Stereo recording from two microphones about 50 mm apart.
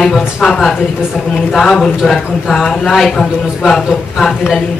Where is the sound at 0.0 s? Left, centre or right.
Centre.